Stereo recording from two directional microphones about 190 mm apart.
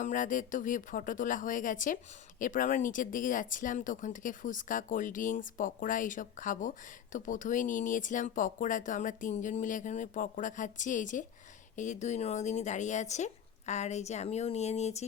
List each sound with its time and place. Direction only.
0.0 s speech: 45° left (ahead or behind)